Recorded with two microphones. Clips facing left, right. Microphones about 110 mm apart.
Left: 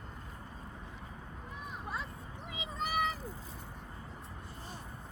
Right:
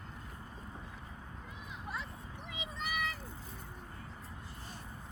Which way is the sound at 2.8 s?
35° left (ahead or behind).